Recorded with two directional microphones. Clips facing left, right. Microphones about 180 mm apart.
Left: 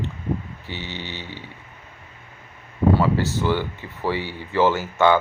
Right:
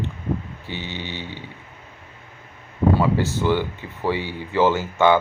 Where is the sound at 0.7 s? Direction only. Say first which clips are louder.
Right 2 dB; 15° right (ahead or behind).